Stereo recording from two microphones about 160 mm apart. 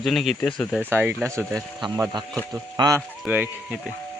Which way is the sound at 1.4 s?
Centre (ahead or behind).